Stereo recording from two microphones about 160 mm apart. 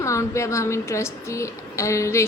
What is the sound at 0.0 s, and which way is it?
A woman's voice, 20° left (ahead or behind).